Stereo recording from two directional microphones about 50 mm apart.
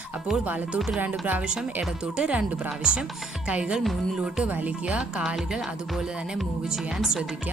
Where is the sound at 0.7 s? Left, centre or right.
Centre.